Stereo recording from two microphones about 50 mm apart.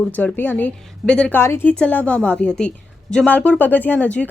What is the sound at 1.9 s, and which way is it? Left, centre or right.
A woman's voice, left.